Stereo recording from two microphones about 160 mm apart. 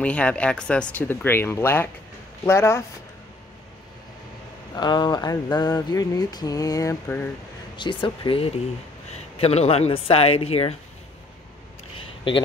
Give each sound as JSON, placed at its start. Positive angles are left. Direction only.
{"t": 0.0, "sound": "speech", "side_deg": 10}
{"t": 4.7, "sound": "a sound", "side_deg": 25}
{"t": 7.7, "sound": "speech", "side_deg": 30}